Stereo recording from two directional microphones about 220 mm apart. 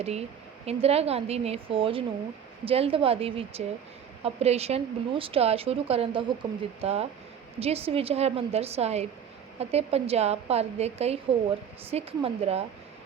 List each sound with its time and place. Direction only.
0.0 s a woman's voice: 30° right (ahead or behind)